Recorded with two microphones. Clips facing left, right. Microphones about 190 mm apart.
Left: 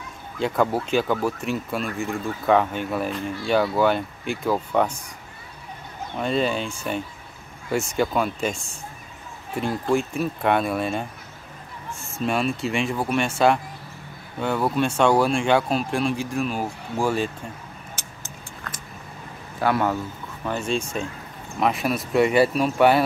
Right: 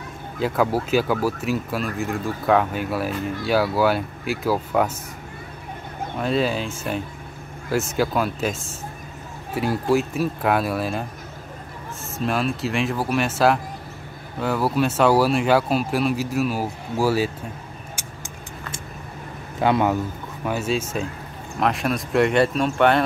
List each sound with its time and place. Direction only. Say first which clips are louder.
0.4 s speech: right 1 dB; 5° right (ahead or behind)
6.1 s speech: right 1 dB; centre (ahead or behind)
18.0 s vehicle: right 3 dB; 10° right (ahead or behind)
19.6 s a man's voice: right 3 dB; 20° right (ahead or behind)
20.4 s speech: right 2 dB; 5° right (ahead or behind)